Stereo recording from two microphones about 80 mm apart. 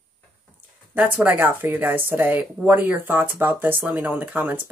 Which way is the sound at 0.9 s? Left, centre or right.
Right.